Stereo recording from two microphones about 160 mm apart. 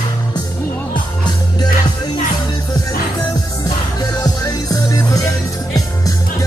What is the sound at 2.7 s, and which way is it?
Music, 20° left (ahead or behind).